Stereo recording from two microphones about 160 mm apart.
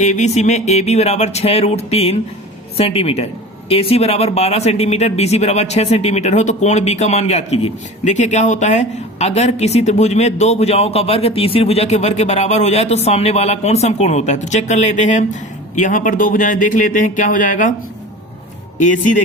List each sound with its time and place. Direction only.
0.0 s speech: 45° left (ahead or behind)